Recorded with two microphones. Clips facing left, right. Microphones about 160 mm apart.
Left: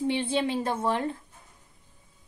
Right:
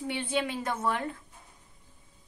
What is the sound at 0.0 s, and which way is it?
A woman's voice, 25° left (ahead or behind).